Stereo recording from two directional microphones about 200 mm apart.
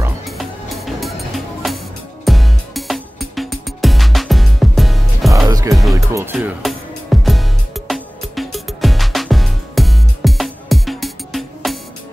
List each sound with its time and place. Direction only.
0.2 s music: centre (ahead or behind)
5.5 s music: 15° right (ahead or behind)
6.3 s music: centre (ahead or behind)